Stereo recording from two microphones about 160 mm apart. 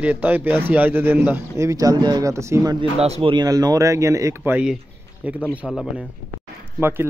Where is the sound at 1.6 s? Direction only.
20° right (ahead or behind).